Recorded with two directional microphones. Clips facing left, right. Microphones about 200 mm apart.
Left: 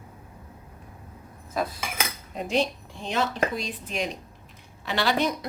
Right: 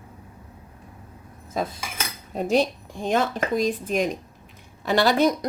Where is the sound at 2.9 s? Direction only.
50° right (ahead or behind).